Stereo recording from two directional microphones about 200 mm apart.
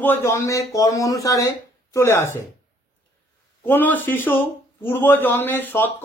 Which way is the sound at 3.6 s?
10° left (ahead or behind).